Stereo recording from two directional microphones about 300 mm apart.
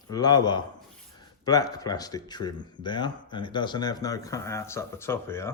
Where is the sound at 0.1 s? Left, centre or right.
Centre.